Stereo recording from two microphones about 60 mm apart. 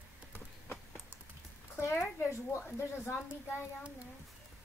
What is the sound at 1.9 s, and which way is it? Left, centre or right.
Speech, left.